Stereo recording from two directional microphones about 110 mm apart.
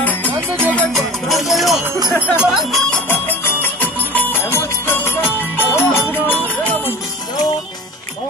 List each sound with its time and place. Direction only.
0.0 s music: 15° left (ahead or behind)
0.9 s music: centre (ahead or behind)
2.3 s speech: 10° right (ahead or behind)
3.1 s music: 20° left (ahead or behind)